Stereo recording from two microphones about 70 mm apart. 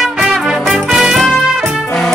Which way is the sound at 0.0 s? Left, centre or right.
Centre.